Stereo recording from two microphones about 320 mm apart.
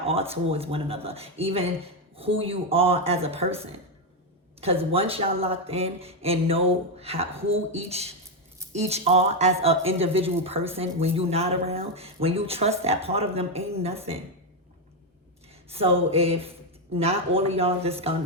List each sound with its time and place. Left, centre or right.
0.0 s speech: centre
15.7 s speech: centre